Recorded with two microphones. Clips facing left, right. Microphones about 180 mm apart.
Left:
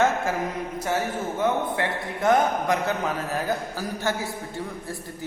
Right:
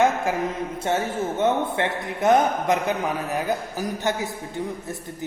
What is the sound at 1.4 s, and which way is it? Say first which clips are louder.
A man's voice: right 2 dB; 25° right (ahead or behind).